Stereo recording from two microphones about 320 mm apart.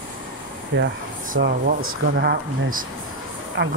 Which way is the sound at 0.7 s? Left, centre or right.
Right.